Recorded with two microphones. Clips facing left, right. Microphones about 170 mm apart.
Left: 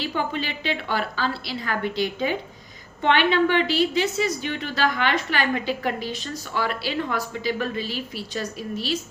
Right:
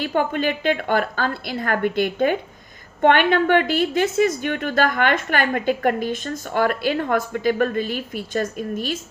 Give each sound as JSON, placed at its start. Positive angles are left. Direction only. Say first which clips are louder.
{"t": 0.0, "sound": "a woman's voice", "louder": "right 6 dB", "side_deg": -50}